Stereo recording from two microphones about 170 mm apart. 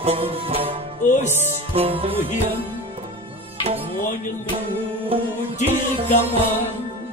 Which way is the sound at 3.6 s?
35° right (ahead or behind).